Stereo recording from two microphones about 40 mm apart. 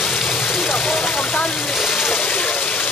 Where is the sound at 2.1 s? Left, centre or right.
Left.